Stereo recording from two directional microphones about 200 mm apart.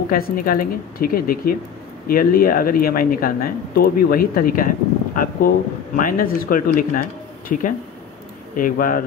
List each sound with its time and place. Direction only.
0.1 s speech: 45° left (ahead or behind)